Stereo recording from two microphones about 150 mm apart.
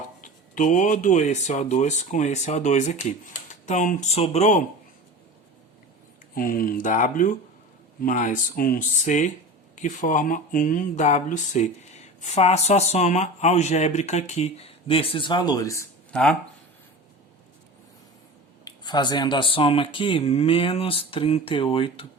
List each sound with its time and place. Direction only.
0.2 s speech: 60° left (ahead or behind)
6.3 s speech: 70° left (ahead or behind); by 15.9 s 20° left (ahead or behind)
16.1 s speech: 5° left (ahead or behind)
18.6 s speech: 30° left (ahead or behind)